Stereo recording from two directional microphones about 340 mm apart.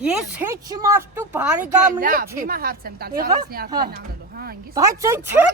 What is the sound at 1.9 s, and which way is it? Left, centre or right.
A woman's voice, right.